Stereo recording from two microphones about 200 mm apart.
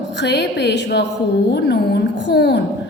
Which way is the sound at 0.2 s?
60° left (ahead or behind).